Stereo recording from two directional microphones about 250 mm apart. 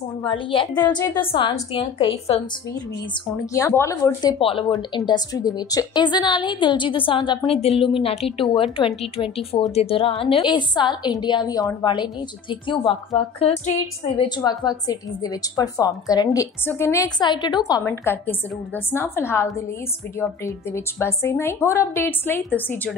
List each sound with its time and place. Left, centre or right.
0.2 s a woman's voice: centre
3.5 s a woman's voice: centre